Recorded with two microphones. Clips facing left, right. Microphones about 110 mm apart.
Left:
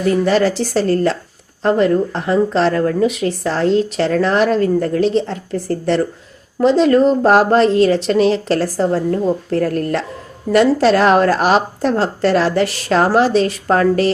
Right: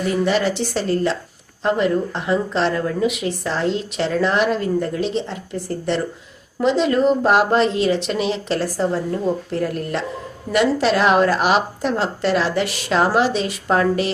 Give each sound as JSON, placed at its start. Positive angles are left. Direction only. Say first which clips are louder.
{"t": 0.3, "sound": "a woman's voice", "louder": "left 4 dB", "side_deg": 40}